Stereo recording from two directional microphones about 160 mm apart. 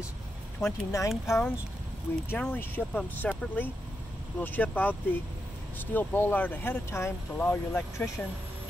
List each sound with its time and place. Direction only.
0.7 s speech: 20° left (ahead or behind)